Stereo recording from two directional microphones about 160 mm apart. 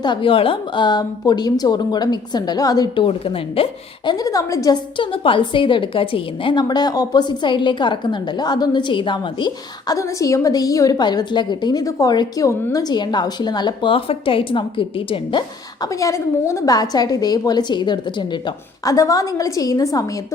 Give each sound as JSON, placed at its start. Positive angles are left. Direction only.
{"t": 0.0, "sound": "a woman's voice", "side_deg": 30}